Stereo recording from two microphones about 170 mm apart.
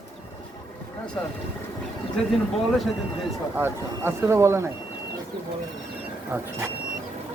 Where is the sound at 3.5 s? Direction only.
15° right (ahead or behind).